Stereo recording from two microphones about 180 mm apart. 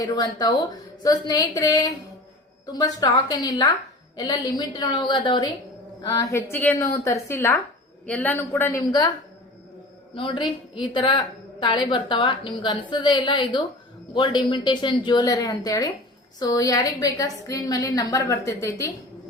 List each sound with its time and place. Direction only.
0.0 s a woman's voice: 20° left (ahead or behind)
6.1 s a woman's voice: 15° left (ahead or behind)
10.2 s a woman's voice: 30° left (ahead or behind)